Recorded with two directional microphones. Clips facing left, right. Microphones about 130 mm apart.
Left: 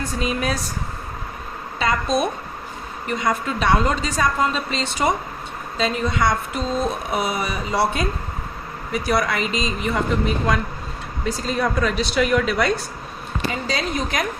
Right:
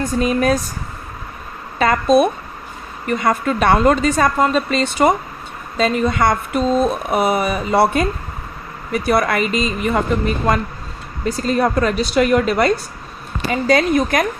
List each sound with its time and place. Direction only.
0.0 s a woman's voice: 45° right (ahead or behind)
1.8 s a woman's voice: 55° right (ahead or behind)